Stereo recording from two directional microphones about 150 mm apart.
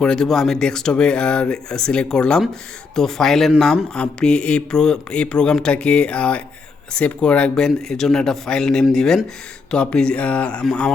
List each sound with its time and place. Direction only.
0.0 s speech: 5° left (ahead or behind)